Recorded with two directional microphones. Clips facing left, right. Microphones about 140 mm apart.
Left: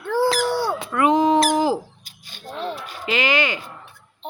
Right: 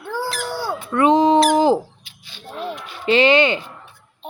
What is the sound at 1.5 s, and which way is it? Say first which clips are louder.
Owl: right 5 dB; 25° right (ahead or behind).